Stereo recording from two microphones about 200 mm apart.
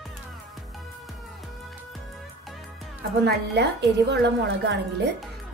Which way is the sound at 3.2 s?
55° right (ahead or behind).